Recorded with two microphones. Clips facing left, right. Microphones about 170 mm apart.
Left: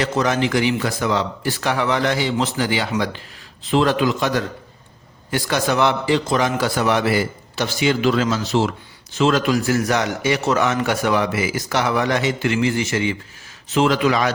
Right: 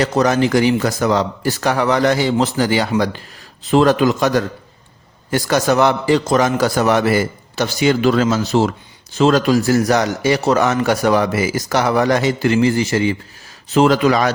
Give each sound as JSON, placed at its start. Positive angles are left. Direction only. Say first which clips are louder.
{"t": 0.0, "sound": "a man's voice", "louder": "right 4 dB", "side_deg": -40}